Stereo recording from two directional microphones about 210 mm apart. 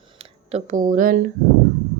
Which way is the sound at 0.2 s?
35° right (ahead or behind).